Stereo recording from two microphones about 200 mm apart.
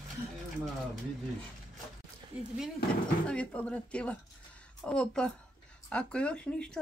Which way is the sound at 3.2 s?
5° left (ahead or behind).